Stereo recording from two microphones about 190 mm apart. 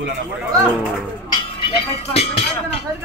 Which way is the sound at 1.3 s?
30° left (ahead or behind).